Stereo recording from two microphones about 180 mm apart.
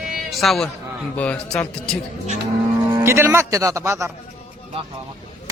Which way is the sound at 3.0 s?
15° right (ahead or behind).